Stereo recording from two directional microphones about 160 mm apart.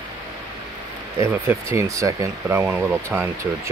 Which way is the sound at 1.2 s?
20° right (ahead or behind).